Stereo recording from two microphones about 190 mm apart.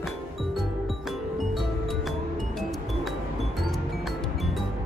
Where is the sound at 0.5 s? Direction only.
Centre (ahead or behind).